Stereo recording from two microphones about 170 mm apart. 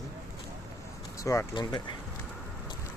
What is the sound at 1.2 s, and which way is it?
Speech, 20° left (ahead or behind).